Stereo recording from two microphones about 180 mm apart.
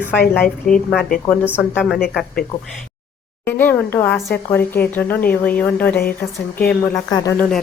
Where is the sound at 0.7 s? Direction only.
50° left (ahead or behind).